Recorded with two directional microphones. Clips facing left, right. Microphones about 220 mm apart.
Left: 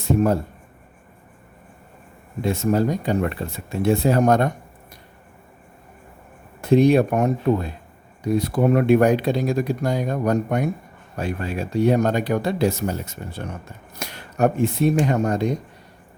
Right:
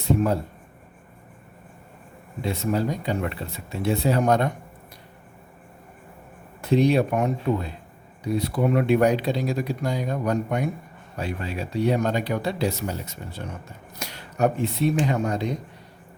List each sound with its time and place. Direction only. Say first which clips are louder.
0.0 s speech: left 3 dB; 45° left (ahead or behind)
2.4 s speech: left 5 dB; 45° left (ahead or behind)
6.6 s speech: left 4 dB; 50° left (ahead or behind)